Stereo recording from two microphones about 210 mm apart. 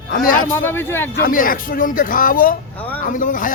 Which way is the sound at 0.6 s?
10° left (ahead or behind).